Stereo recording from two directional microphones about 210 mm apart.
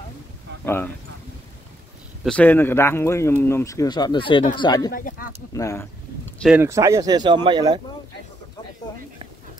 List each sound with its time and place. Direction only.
0.7 s speech: 10° left (ahead or behind)
2.2 s speech: 5° left (ahead or behind)
4.9 s speech: 40° left (ahead or behind)
5.5 s speech: 15° left (ahead or behind)
6.4 s speech: 10° right (ahead or behind)